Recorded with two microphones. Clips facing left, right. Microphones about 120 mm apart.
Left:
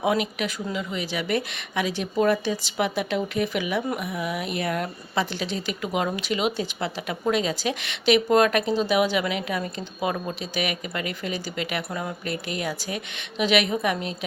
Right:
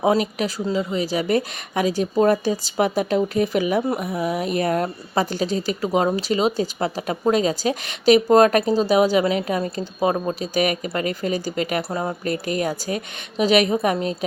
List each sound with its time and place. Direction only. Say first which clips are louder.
0.0 s speech: right 5 dB; 35° right (ahead or behind)